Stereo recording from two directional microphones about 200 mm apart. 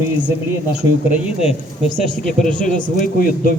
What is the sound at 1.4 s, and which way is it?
A man's voice, 30° left (ahead or behind).